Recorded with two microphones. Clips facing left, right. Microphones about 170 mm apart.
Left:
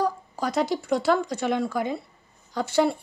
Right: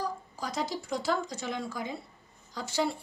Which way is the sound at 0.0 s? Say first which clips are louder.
Left 9 dB; 65° left (ahead or behind).